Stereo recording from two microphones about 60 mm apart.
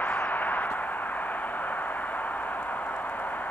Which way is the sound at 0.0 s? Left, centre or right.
Left.